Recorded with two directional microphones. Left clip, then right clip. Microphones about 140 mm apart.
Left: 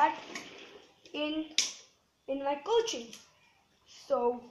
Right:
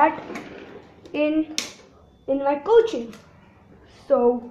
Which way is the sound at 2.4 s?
10° left (ahead or behind).